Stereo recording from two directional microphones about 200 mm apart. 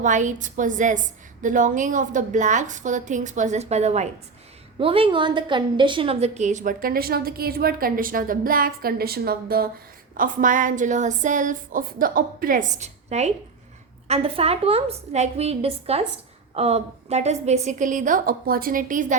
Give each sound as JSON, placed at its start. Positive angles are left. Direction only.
{"t": 0.0, "sound": "a woman's voice", "side_deg": -40}